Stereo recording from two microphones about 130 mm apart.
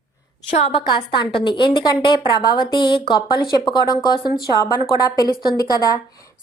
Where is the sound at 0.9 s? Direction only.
35° left (ahead or behind).